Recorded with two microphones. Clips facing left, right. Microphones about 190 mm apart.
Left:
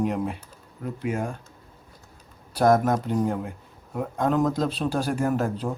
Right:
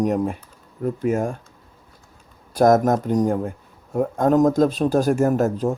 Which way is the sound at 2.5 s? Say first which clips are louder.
Right 4 dB; 45° right (ahead or behind).